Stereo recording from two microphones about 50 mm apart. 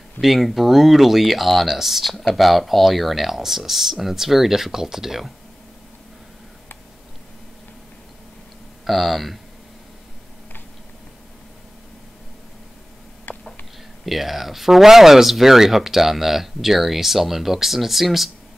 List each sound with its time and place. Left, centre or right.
0.2 s speech: centre
8.8 s speech: centre
13.3 s a sound: left
14.0 s speech: centre